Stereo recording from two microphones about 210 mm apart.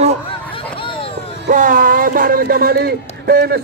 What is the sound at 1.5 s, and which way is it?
Speech, 40° right (ahead or behind).